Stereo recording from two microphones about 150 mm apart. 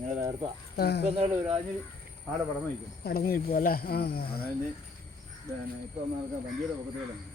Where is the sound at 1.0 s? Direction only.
40° right (ahead or behind).